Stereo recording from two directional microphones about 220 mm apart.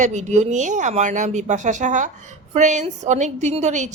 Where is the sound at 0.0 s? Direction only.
30° right (ahead or behind).